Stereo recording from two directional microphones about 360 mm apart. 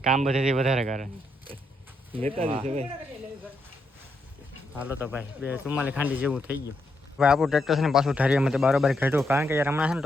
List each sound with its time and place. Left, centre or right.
0.0 s speech: centre
4.9 s a man's voice: centre